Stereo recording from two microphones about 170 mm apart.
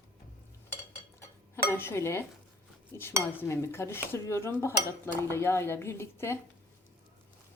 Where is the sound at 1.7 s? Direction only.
15° left (ahead or behind).